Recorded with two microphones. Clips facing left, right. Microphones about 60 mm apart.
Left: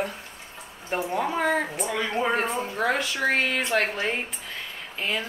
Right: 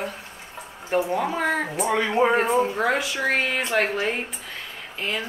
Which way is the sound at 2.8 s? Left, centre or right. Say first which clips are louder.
Right 2 dB; centre.